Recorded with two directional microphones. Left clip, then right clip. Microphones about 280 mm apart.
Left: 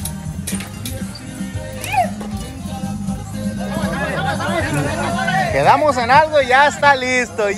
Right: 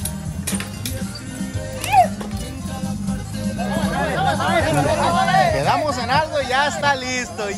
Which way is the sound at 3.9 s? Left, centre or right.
Right.